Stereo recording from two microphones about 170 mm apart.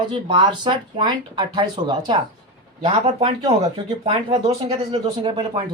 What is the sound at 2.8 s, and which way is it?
Speech, 35° right (ahead or behind).